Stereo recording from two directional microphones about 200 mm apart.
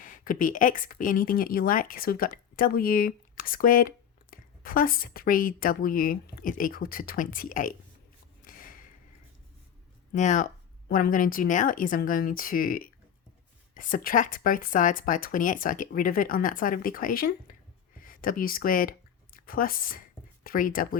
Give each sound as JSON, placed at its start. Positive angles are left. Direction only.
{"t": 0.0, "sound": "a woman's voice", "side_deg": 45}
{"t": 8.4, "sound": "a sound", "side_deg": 45}
{"t": 10.1, "sound": "a woman's voice", "side_deg": 40}